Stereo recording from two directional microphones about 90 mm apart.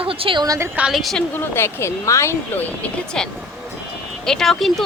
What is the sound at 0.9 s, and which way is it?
Speech, centre (ahead or behind).